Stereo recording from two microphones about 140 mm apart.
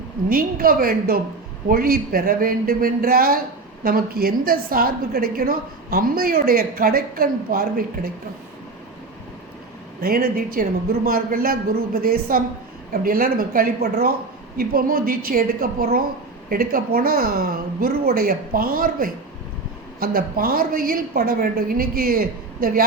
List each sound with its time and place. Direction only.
0.3 s a woman's voice: 90° right
10.0 s a woman's voice: 90° right